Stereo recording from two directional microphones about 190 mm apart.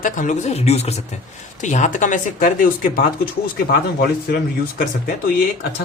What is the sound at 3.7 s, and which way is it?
Speech, 55° left (ahead or behind).